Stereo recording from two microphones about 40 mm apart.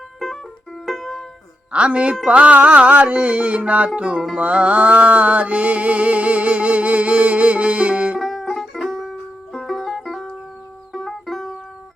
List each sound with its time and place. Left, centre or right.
0.2 s music: centre
1.7 s speech: right
2.2 s music: right
8.2 s music: centre